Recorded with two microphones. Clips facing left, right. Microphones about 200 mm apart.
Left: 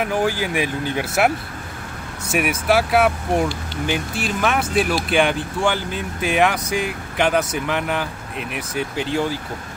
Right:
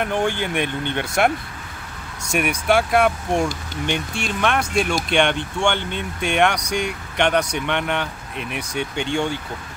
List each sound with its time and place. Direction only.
0.0 s speech: 5° left (ahead or behind)